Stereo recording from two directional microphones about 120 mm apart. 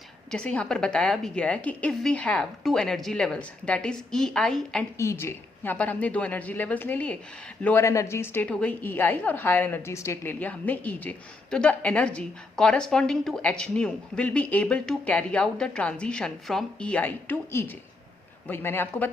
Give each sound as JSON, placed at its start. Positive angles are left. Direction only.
{"t": 0.3, "sound": "a woman's voice", "side_deg": 5}
{"t": 4.9, "sound": "a woman's voice", "side_deg": 20}